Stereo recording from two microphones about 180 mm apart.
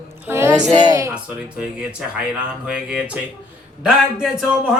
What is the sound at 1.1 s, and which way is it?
A man's voice, 5° right (ahead or behind).